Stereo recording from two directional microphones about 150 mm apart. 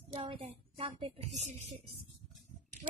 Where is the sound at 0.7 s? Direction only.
40° right (ahead or behind).